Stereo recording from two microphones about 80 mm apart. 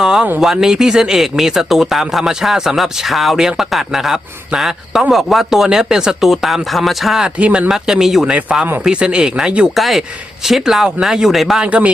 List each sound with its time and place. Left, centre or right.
0.0 s a sound: centre
0.3 s speech: centre
7.3 s speech: centre
7.7 s speech: centre
8.4 s speech: centre
9.7 s speech: centre
11.6 s speech: centre